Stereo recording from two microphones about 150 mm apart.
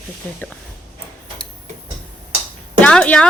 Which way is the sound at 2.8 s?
10° left (ahead or behind).